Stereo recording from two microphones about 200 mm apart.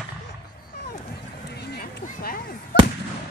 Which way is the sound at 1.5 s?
50° left (ahead or behind).